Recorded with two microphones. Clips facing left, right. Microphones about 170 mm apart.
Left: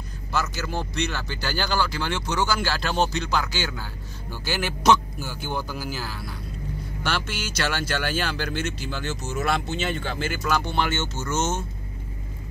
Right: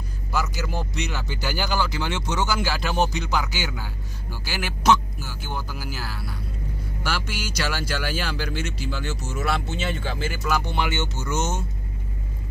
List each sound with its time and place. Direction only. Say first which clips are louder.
0.3 s speech: even; 10° right (ahead or behind)